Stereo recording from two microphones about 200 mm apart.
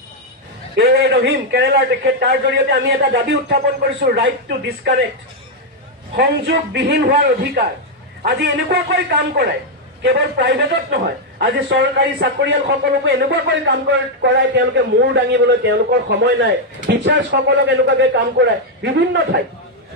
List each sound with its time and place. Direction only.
0.7 s a man's voice: 55° right (ahead or behind)
6.1 s a man's voice: 55° right (ahead or behind)